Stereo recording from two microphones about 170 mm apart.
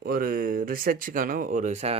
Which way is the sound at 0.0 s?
60° right (ahead or behind).